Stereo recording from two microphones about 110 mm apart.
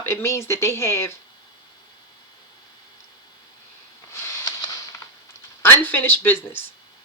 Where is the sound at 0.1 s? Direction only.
25° left (ahead or behind).